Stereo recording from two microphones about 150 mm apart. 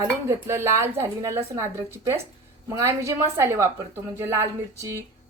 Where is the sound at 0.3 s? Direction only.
15° right (ahead or behind).